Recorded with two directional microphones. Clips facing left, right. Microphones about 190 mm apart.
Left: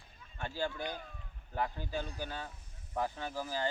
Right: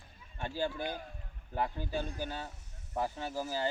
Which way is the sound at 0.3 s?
15° right (ahead or behind).